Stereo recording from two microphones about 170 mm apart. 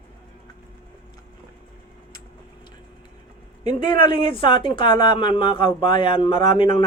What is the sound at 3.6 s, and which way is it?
Speech, 45° right (ahead or behind).